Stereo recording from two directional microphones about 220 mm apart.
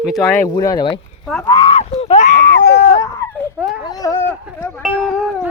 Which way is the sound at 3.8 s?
15° left (ahead or behind).